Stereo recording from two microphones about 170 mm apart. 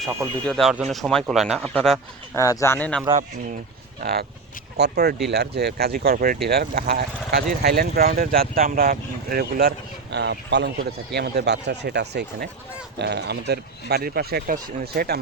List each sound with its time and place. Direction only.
0.4 s speech: centre (ahead or behind)
2.3 s speech: 20° left (ahead or behind)
4.0 s speech: 65° right (ahead or behind)